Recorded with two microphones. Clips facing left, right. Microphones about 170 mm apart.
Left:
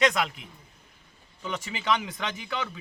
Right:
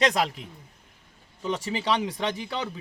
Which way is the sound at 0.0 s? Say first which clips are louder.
Right 1 dB; 35° right (ahead or behind).